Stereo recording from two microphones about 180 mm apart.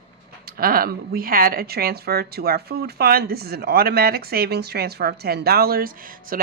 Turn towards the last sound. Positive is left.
turn(degrees=-50)  # may be behind; listen again after turning